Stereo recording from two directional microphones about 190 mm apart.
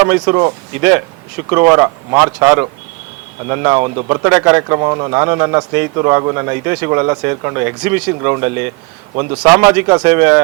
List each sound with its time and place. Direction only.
0.0 s speech: 20° right (ahead or behind)